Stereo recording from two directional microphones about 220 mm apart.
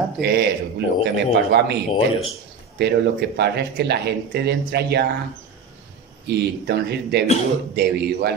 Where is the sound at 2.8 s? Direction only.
50° right (ahead or behind).